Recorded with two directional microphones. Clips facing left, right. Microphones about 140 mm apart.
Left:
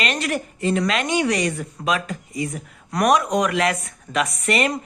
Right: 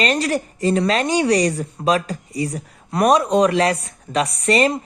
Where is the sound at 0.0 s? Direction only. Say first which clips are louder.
Right 5 dB; 35° right (ahead or behind).